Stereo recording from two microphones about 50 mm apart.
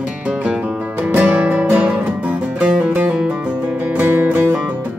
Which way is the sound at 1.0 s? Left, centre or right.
Right.